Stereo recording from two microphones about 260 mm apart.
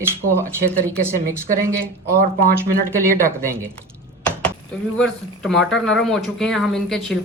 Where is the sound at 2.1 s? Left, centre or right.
Right.